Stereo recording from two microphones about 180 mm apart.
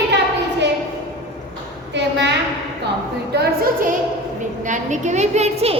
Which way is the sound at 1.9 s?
75° right (ahead or behind).